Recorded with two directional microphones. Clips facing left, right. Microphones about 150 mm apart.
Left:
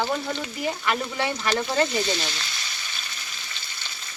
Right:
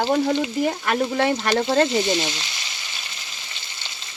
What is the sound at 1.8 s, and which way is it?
Frying, 20° right (ahead or behind).